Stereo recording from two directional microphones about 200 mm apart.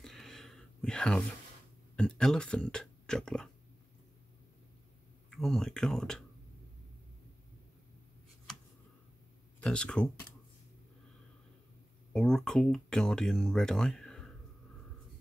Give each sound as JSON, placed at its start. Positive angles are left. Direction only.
{"t": 0.0, "sound": "a sound", "side_deg": 0}
{"t": 2.0, "sound": "speech", "side_deg": 5}
{"t": 5.3, "sound": "speech", "side_deg": 0}
{"t": 9.6, "sound": "speech", "side_deg": 5}
{"t": 12.1, "sound": "speech", "side_deg": 5}